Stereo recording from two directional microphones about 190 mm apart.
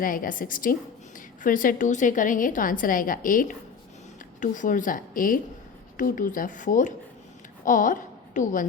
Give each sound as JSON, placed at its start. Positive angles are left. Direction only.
{"t": 0.0, "sound": "a woman's voice", "side_deg": 45}